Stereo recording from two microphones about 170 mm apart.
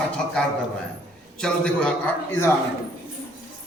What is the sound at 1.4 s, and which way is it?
Speech, 5° left (ahead or behind).